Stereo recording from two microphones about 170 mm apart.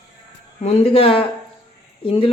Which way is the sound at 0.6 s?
35° left (ahead or behind).